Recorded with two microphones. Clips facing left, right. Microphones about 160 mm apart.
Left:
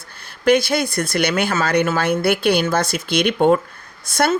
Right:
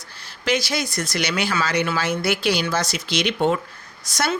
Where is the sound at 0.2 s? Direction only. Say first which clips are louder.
Left 8 dB; 55° left (ahead or behind).